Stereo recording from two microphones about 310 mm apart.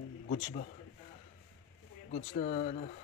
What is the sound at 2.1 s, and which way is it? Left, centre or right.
Speech, left.